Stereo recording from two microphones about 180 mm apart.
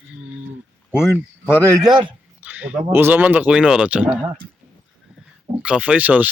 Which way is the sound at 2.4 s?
10° right (ahead or behind).